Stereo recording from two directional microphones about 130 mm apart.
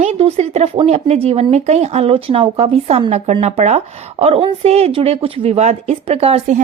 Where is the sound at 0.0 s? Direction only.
50° right (ahead or behind).